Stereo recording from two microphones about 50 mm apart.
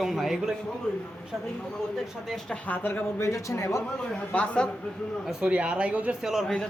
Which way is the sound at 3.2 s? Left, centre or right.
Left.